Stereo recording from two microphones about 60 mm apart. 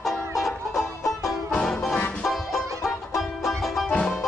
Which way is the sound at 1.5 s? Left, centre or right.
Centre.